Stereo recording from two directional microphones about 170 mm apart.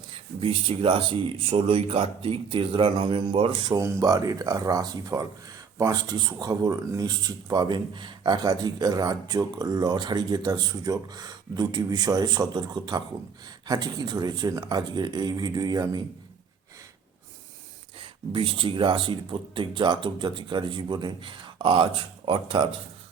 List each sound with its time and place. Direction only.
0.1 s speech: 30° right (ahead or behind)
18.0 s speech: 30° right (ahead or behind)